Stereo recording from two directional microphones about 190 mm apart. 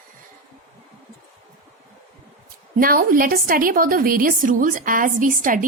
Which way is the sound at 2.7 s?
50° right (ahead or behind).